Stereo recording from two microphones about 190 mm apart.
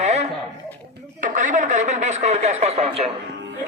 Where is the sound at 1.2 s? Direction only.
45° right (ahead or behind).